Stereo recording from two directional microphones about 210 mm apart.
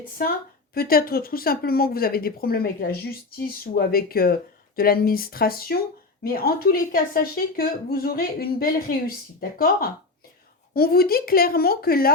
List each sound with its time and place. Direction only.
0.2 s speech: 45° left (ahead or behind)